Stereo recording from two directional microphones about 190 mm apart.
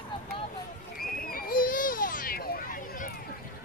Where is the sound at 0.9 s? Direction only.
50° left (ahead or behind).